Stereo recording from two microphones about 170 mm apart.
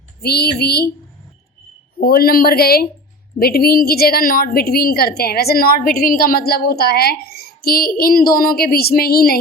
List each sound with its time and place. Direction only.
0.2 s speech: 70° left (ahead or behind)
2.0 s a woman's voice: 60° left (ahead or behind)